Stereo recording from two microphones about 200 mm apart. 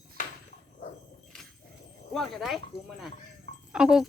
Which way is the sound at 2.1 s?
Centre (ahead or behind).